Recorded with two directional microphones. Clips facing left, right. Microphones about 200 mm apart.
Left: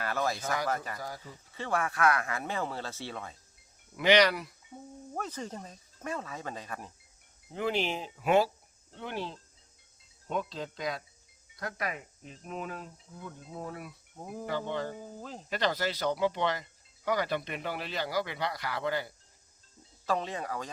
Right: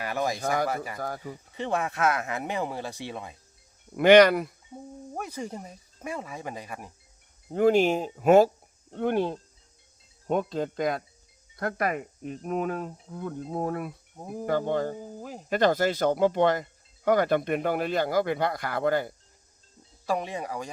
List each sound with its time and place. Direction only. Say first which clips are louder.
0.0 s speech: right 4 dB; 15° right (ahead or behind)
0.9 s speech: right 7 dB; 55° right (ahead or behind)
1.5 s speech: right 3 dB; 20° right (ahead or behind)
3.9 s speech: right 8 dB; 50° right (ahead or behind)
5.1 s speech: right 3 dB; 10° right (ahead or behind)
7.5 s speech: right 10 dB; 45° right (ahead or behind)
14.9 s speech: right 4 dB; 10° right (ahead or behind)
15.4 s speech: right 8 dB; 50° right (ahead or behind)
20.1 s speech: right 3 dB; 10° right (ahead or behind)